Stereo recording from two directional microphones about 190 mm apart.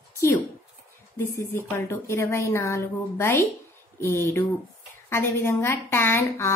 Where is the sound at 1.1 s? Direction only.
15° left (ahead or behind).